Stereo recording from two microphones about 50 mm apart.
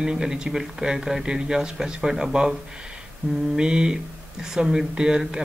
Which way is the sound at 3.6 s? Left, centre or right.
Centre.